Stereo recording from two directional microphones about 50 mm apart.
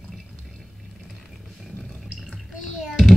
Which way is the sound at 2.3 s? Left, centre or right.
Centre.